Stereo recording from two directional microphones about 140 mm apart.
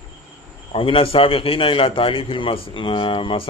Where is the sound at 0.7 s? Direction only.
40° left (ahead or behind).